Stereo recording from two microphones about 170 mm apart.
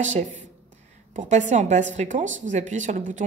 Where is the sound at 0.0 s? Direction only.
45° right (ahead or behind).